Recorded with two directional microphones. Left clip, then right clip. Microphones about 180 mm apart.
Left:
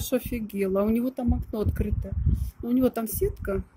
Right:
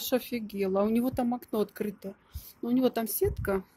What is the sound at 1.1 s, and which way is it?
Speech, 25° right (ahead or behind).